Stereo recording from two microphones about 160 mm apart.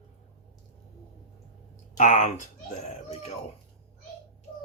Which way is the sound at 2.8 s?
45° left (ahead or behind).